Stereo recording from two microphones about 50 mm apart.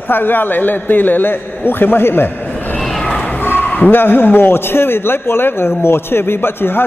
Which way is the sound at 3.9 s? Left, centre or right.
Left.